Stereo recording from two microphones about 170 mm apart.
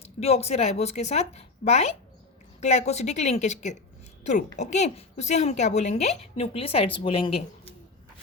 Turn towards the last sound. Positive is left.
turn(degrees=35)  # may be behind; listen again after turning